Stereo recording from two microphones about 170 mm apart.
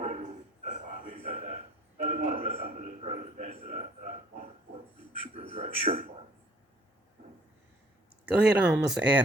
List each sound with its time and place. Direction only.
0.0 s bow-wow: 45° right (ahead or behind)
1.2 s a man's voice: 50° right (ahead or behind)
5.5 s a man's voice: 35° right (ahead or behind)
8.4 s speech: 5° right (ahead or behind)